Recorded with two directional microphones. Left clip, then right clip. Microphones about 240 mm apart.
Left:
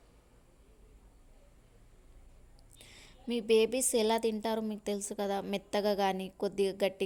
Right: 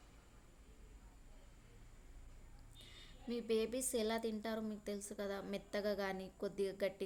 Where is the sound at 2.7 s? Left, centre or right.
Left.